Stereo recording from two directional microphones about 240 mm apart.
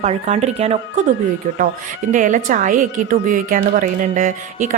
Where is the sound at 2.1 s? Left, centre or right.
Right.